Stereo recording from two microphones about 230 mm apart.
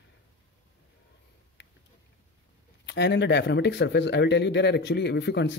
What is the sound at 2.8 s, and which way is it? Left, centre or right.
Speech, left.